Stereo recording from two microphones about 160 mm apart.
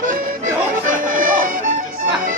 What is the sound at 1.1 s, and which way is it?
Music, 60° right (ahead or behind).